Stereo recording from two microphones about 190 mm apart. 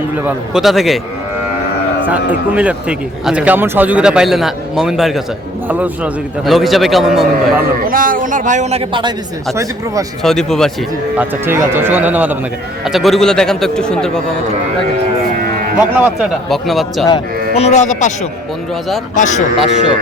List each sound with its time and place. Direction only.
0.3 s a man's voice: centre (ahead or behind)
2.0 s a man's voice: 10° right (ahead or behind)
7.9 s a man's voice: 45° right (ahead or behind); by 10.1 s 20° right (ahead or behind)
10.2 s a man's voice: centre (ahead or behind)
11.2 s a man's voice: 10° right (ahead or behind); by 14.1 s 5° left (ahead or behind)
15.8 s a man's voice: 10° right (ahead or behind)
17.5 s speech: 35° left (ahead or behind)